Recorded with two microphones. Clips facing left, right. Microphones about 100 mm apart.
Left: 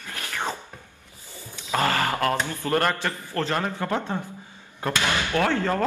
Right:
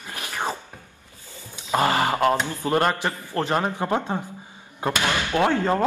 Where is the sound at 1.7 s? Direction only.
20° right (ahead or behind).